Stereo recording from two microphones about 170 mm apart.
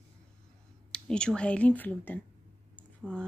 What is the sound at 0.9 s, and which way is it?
Speech, 5° left (ahead or behind).